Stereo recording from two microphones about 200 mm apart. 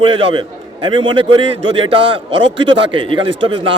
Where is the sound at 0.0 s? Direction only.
25° right (ahead or behind).